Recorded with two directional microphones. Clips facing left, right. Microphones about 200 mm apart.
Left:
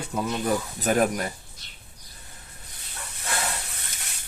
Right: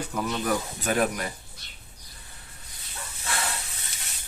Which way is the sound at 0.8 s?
40° left (ahead or behind).